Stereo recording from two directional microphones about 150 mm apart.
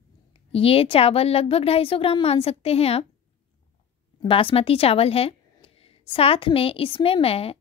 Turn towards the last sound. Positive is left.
turn(degrees=40)  # may be behind; listen again after turning